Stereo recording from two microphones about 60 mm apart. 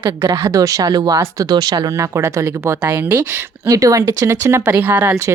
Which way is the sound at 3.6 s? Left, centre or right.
Right.